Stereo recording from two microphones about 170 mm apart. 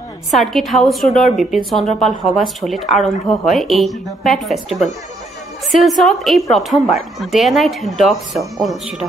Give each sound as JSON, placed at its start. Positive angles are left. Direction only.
{"t": 0.3, "sound": "a woman's voice", "side_deg": 0}